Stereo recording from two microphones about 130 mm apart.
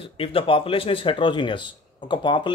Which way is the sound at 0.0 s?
45° left (ahead or behind).